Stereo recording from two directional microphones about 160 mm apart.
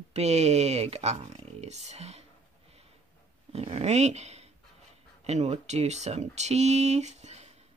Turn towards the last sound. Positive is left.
turn(degrees=-45)  # may be behind; listen again after turning